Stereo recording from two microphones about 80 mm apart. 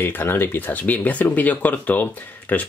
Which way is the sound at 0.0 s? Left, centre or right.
Left.